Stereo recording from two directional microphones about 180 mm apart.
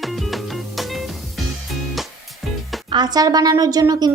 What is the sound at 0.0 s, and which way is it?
Music, centre (ahead or behind).